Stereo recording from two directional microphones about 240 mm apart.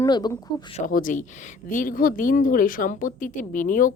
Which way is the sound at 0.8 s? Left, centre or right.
Left.